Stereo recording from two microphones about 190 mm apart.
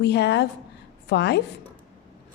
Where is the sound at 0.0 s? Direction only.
65° left (ahead or behind).